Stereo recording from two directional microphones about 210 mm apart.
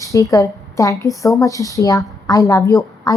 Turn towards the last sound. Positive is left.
turn(degrees=15)  # may be behind; listen again after turning